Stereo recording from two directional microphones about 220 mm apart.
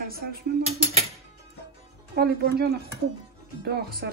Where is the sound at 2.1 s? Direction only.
45° right (ahead or behind).